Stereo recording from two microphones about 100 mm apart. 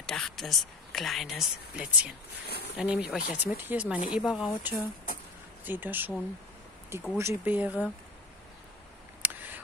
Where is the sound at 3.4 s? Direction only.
20° right (ahead or behind).